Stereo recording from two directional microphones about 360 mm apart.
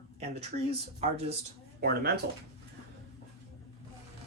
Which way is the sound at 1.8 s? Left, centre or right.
Right.